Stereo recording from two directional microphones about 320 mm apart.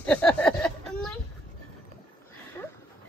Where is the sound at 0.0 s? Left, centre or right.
Centre.